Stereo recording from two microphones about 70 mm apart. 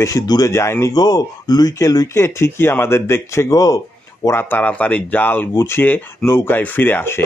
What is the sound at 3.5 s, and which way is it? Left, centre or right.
Speech, left.